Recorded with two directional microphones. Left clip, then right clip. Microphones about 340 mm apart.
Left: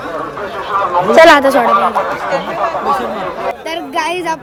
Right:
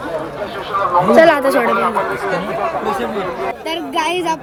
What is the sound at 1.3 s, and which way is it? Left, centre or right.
Speech, centre.